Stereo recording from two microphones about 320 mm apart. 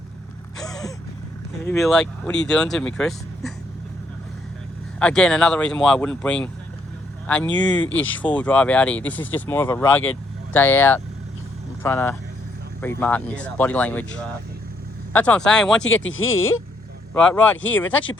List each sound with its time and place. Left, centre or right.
0.6 s gasp: centre
1.6 s speech: centre
4.9 s speech: centre
15.8 s speech: left
17.2 s speech: centre